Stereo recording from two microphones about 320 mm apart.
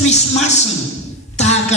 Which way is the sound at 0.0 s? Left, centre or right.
Left.